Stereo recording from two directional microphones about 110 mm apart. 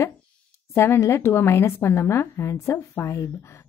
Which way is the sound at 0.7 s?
20° left (ahead or behind).